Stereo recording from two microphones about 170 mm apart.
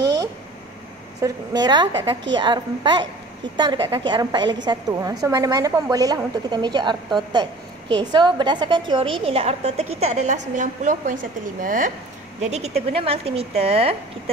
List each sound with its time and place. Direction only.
0.0 s a sound: 25° right (ahead or behind)
1.2 s a woman's voice: 25° right (ahead or behind); by 11.9 s 50° right (ahead or behind)
12.4 s a woman's voice: 40° right (ahead or behind)